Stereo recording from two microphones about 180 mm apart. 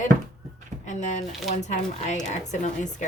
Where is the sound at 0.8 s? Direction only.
40° left (ahead or behind).